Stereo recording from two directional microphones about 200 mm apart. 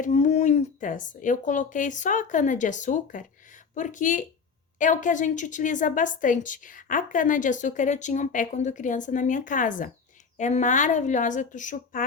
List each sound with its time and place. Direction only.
0.0 s a woman's voice: 35° left (ahead or behind)